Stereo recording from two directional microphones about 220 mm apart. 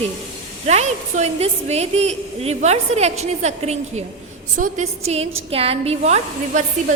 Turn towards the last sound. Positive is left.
turn(degrees=-30)  # may be behind; listen again after turning